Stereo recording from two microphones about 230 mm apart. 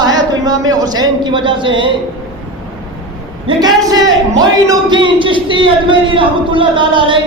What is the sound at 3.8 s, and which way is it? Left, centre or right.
A man's voice, centre.